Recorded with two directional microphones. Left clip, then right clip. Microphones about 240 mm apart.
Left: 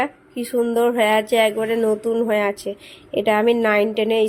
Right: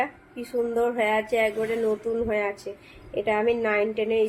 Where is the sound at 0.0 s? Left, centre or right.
Left.